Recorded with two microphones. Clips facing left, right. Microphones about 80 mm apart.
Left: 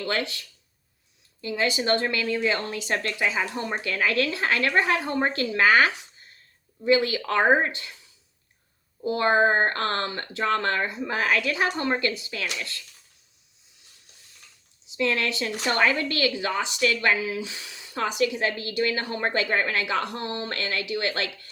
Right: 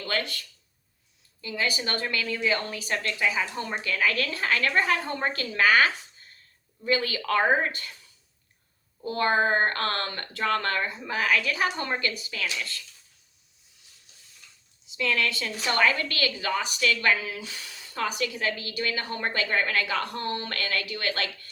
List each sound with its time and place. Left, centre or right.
0.0 s speech: left
9.0 s speech: centre
11.1 s speech: left
14.9 s speech: left